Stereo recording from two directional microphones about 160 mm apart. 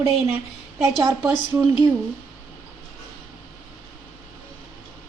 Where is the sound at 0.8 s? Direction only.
20° right (ahead or behind).